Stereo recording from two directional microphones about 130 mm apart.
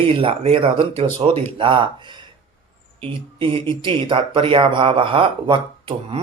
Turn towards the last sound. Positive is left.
turn(degrees=-40)  # may be behind; listen again after turning